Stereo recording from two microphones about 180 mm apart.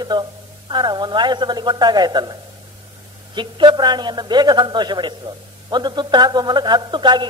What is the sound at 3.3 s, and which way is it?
A man's voice, 25° right (ahead or behind).